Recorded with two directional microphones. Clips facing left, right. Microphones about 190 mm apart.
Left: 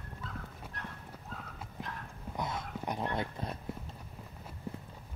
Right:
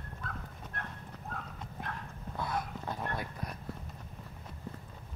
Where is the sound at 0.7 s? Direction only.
55° right (ahead or behind).